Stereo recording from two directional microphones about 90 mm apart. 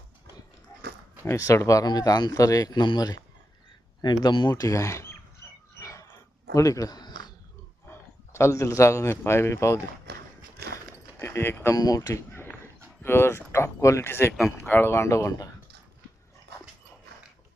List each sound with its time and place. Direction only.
1.2 s speech: 35° left (ahead or behind)
5.8 s dog: 40° left (ahead or behind)
6.5 s a sound: 40° left (ahead or behind)
7.9 s a man's voice: 30° left (ahead or behind)
11.2 s speech: 25° left (ahead or behind)
11.7 s speech: 40° left (ahead or behind)